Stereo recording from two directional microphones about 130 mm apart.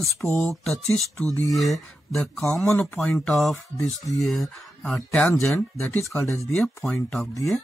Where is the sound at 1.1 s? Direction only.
15° left (ahead or behind).